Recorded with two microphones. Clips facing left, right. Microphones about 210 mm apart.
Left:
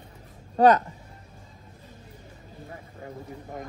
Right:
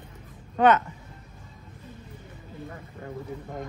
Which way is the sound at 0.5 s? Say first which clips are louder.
Left 2 dB; 35° left (ahead or behind).